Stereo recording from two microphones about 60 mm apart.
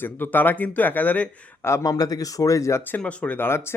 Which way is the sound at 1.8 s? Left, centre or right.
Left.